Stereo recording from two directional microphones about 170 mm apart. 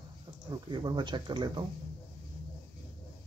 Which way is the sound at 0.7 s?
25° right (ahead or behind).